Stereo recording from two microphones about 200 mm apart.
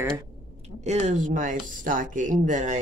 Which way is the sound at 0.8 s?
35° right (ahead or behind).